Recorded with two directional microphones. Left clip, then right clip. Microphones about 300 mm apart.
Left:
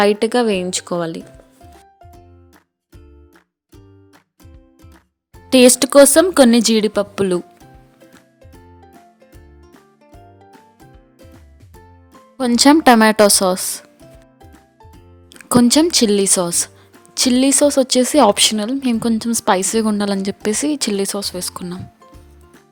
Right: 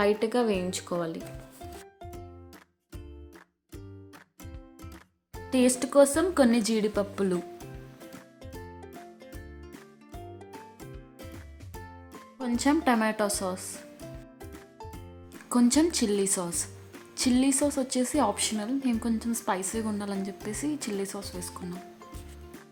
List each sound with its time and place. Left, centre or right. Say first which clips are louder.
0.0 s speech: left 11 dB; left
5.5 s speech: left 15 dB; left
12.4 s speech: left 15 dB; left
15.3 s speech: left 12 dB; left